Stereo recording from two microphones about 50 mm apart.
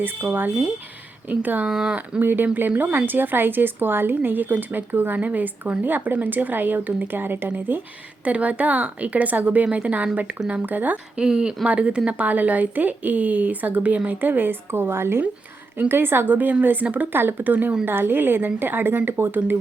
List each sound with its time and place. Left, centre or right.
0.0 s a woman's voice: right
1.7 s speech: centre
2.2 s a woman's voice: right
8.2 s a woman's voice: right
11.2 s a woman's voice: centre; by 17.1 s right
17.1 s a woman's voice: right